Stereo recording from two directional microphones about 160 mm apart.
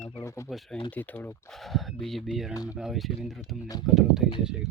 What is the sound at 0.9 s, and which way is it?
Speech, 10° left (ahead or behind).